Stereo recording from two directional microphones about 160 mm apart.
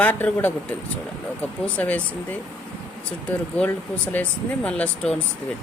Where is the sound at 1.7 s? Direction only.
10° left (ahead or behind).